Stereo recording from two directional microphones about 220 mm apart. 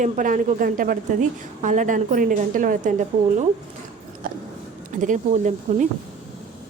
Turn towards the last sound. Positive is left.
turn(degrees=-35)  # may be behind; listen again after turning